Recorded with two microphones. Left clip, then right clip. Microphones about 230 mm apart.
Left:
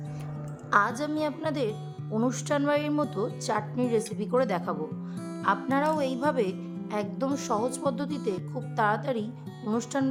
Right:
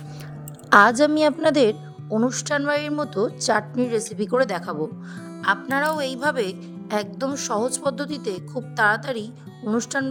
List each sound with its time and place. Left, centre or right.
0.7 s speech: right; by 10.1 s centre